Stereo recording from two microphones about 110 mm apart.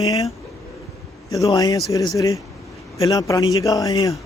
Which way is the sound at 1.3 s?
35° left (ahead or behind).